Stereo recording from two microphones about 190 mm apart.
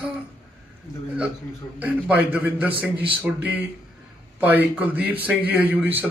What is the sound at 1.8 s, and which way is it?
A man's voice, 5° right (ahead or behind).